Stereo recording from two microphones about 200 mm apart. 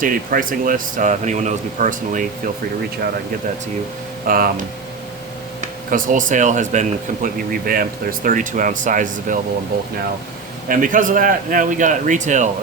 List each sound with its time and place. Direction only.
0.0 s speech: 45° right (ahead or behind)
4.3 s speech: 45° right (ahead or behind)
5.9 s speech: 40° right (ahead or behind)